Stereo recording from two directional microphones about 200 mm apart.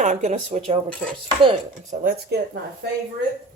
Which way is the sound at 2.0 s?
50° right (ahead or behind).